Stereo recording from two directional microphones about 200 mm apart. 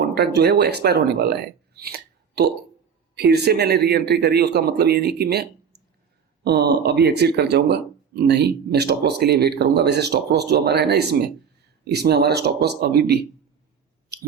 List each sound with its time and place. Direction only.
0.1 s speech: 55° right (ahead or behind)